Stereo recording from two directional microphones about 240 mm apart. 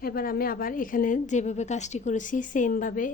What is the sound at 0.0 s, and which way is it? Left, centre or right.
A woman's voice, left.